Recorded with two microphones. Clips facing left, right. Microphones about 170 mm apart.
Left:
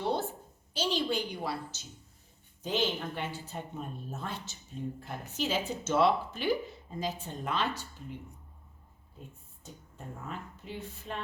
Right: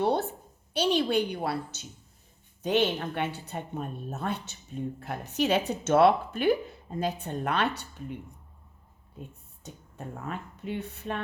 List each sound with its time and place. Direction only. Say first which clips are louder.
0.0 s a woman's voice: right 5 dB; 65° right (ahead or behind)
9.6 s speech: right 5 dB; 70° right (ahead or behind)